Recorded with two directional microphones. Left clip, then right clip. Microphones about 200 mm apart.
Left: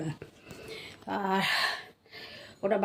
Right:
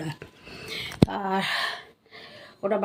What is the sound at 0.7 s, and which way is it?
A woman's voice, centre (ahead or behind).